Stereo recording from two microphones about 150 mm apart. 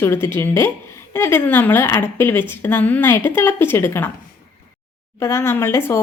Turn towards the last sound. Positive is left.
turn(degrees=15)  # may be behind; listen again after turning